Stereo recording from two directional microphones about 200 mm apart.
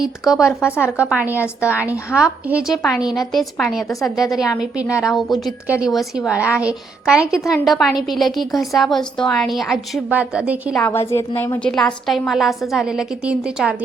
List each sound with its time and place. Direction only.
0.0 s a woman's voice: 5° right (ahead or behind)
4.1 s a woman's voice: 20° left (ahead or behind)
4.4 s a woman's voice: 5° right (ahead or behind)
11.1 s a woman's voice: 15° left (ahead or behind); by 13.7 s 5° right (ahead or behind)